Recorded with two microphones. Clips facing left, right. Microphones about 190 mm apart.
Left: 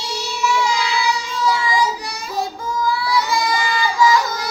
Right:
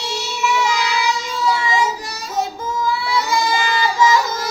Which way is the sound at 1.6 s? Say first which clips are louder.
Even; 25° right (ahead or behind).